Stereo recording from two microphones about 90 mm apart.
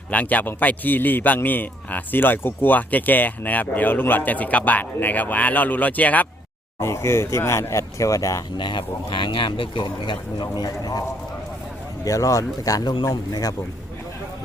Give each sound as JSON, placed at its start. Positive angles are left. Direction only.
{"t": 0.1, "sound": "a man's voice", "side_deg": 15}
{"t": 6.7, "sound": "speech", "side_deg": 30}
{"t": 8.5, "sound": "speech", "side_deg": 60}
{"t": 12.0, "sound": "speech", "side_deg": 40}